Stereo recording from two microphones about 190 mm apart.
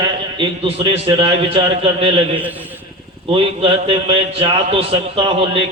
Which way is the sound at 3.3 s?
30° right (ahead or behind).